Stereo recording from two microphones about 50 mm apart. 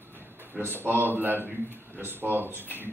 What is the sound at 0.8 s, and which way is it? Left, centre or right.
A man's voice, right.